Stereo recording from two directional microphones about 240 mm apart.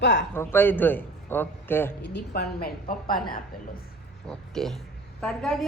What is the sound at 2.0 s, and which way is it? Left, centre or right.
A woman's voice, left.